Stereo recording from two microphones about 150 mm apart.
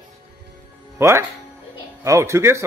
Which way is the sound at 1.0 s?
15° right (ahead or behind).